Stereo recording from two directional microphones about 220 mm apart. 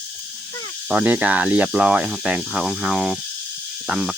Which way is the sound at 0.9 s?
5° right (ahead or behind).